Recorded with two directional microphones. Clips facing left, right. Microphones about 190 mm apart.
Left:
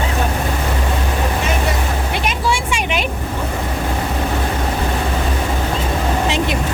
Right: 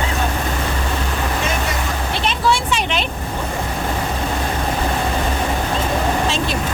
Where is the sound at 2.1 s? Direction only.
10° left (ahead or behind).